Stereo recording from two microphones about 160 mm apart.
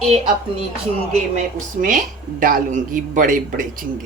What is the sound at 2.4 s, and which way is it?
A man's voice, 60° right (ahead or behind).